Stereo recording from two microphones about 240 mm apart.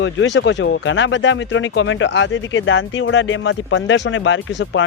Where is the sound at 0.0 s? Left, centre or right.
Left.